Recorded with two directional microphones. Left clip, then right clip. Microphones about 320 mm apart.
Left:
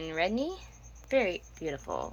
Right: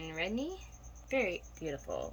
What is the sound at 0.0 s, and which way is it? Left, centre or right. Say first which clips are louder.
Speech: left 7 dB; centre.